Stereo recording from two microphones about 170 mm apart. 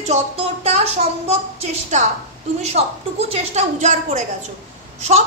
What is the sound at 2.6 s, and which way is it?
A woman's voice, 40° right (ahead or behind).